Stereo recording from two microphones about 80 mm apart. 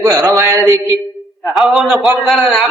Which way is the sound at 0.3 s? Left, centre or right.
Right.